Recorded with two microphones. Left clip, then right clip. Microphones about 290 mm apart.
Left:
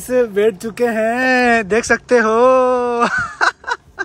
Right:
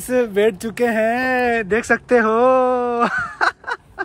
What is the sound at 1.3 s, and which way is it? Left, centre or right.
Speech, left.